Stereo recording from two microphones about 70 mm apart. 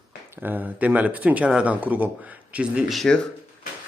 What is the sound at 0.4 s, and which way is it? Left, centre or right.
A man's voice, right.